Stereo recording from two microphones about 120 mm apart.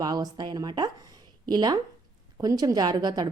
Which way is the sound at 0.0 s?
35° right (ahead or behind).